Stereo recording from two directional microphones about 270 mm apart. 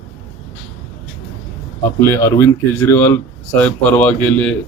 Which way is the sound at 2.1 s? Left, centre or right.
Centre.